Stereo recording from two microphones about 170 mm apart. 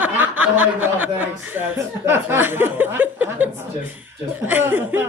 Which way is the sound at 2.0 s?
15° right (ahead or behind).